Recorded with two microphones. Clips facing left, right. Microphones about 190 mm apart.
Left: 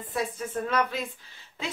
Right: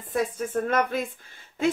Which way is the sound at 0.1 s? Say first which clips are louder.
Right 5 dB; 50° right (ahead or behind).